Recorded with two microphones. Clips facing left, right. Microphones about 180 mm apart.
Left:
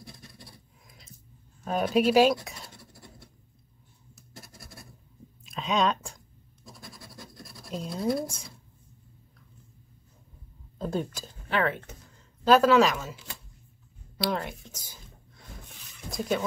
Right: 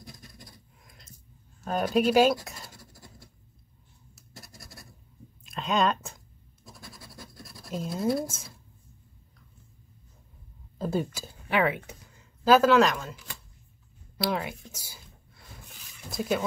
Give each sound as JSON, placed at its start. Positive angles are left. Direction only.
{"t": 0.0, "sound": "a sound", "side_deg": 25}
{"t": 0.3, "sound": "scratch", "side_deg": 0}
{"t": 1.6, "sound": "speech", "side_deg": 0}
{"t": 5.4, "sound": "scratch", "side_deg": 0}
{"t": 10.8, "sound": "speech", "side_deg": -5}
{"t": 14.1, "sound": "writing", "side_deg": -5}